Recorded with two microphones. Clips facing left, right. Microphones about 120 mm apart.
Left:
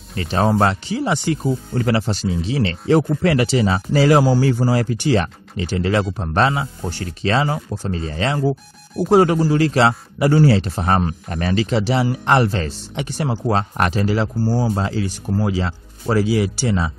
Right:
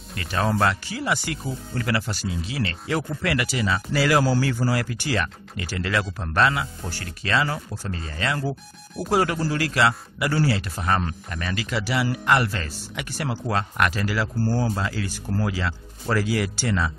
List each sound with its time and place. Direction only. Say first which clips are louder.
0.1 s a man's voice: left 6 dB; 30° left (ahead or behind)
4.2 s speech: left 5 dB; 15° left (ahead or behind)
4.5 s a man's voice: left 6 dB; 25° left (ahead or behind)
14.4 s speech: left 1 dB; 10° left (ahead or behind)
14.7 s a man's voice: left 6 dB; 25° left (ahead or behind)